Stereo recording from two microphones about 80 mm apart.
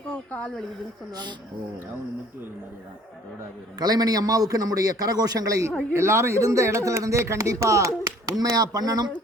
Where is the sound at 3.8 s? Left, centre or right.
Right.